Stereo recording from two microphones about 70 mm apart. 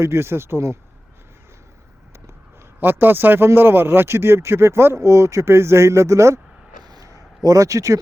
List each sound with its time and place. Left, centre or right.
0.0 s a man's voice: right
2.8 s a man's voice: right
6.8 s a sound: right